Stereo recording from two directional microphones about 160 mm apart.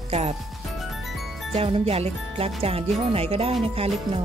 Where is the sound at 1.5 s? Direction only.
35° right (ahead or behind).